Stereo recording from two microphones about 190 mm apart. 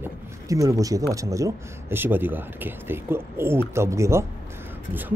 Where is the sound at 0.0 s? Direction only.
15° right (ahead or behind).